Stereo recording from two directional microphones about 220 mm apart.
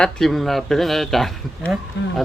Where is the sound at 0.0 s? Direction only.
Centre (ahead or behind).